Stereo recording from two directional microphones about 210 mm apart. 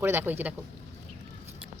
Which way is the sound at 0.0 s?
10° right (ahead or behind).